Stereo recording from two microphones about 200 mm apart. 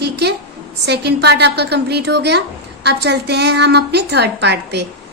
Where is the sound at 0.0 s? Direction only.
55° right (ahead or behind).